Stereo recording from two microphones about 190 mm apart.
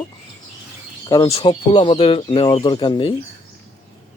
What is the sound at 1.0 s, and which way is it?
Speech, 20° left (ahead or behind).